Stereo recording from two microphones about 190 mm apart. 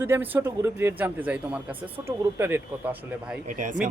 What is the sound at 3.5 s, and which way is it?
Speech, 45° right (ahead or behind).